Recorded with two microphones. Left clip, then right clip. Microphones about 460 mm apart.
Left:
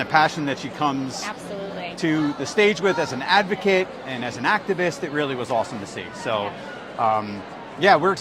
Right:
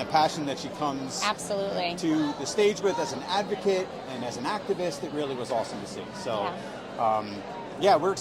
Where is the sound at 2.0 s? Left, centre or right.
Left.